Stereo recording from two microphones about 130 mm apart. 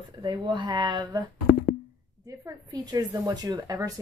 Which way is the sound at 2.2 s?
30° right (ahead or behind).